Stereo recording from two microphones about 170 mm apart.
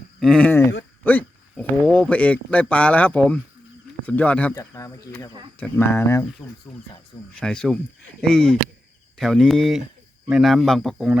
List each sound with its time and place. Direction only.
0.2 s speech: 5° left (ahead or behind)
4.7 s speech: 20° left (ahead or behind)
5.5 s speech: 10° left (ahead or behind)
7.3 s speech: 5° left (ahead or behind)